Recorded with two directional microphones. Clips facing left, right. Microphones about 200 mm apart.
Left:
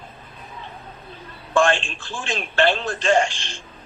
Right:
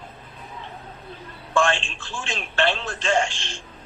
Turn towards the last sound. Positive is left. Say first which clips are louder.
# left 3 dB
turn(degrees=0)  # may be behind; listen again after turning